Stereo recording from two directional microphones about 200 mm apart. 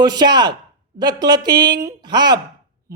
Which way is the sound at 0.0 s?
20° right (ahead or behind).